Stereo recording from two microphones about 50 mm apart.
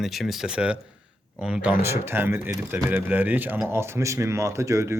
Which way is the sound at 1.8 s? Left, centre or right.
Right.